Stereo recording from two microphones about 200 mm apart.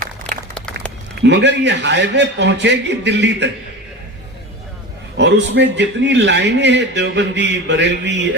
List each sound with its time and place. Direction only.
0.5 s a sound: 5° left (ahead or behind)
1.2 s a man's voice: 60° right (ahead or behind)
5.1 s a man's voice: 60° right (ahead or behind)